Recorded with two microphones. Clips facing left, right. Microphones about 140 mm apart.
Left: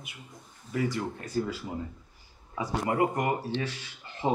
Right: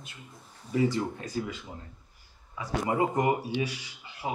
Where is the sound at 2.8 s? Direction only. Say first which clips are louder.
Right 1 dB; 20° right (ahead or behind).